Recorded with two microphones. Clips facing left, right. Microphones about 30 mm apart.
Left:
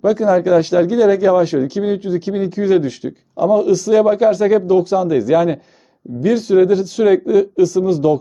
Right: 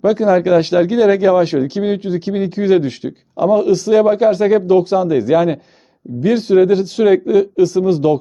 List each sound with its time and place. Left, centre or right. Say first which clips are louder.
0.0 s speech: right 1 dB; right
4.6 s speech: right 1 dB; right
4.9 s speech: right 1 dB; centre
6.7 s speech: right 1 dB; right
7.0 s speech: right 1 dB; centre